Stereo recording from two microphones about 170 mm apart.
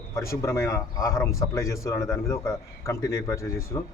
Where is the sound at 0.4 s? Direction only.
15° left (ahead or behind).